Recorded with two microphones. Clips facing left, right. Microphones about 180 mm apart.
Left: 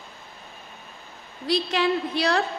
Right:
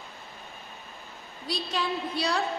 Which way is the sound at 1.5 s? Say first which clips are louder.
Left 8 dB; 85° left.